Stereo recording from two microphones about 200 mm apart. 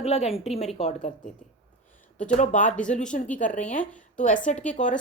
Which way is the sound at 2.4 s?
40° left (ahead or behind).